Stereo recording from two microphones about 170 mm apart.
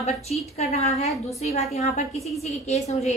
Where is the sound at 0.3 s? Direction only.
40° left (ahead or behind).